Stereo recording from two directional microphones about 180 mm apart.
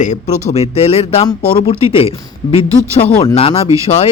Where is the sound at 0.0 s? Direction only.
40° left (ahead or behind).